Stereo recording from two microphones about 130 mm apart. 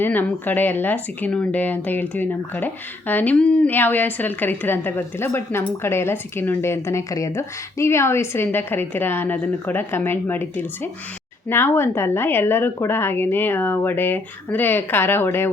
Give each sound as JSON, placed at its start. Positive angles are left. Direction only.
{"t": 0.0, "sound": "speech", "side_deg": 15}